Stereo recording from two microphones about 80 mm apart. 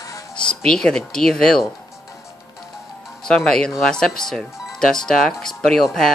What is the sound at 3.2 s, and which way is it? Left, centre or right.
Speech, centre.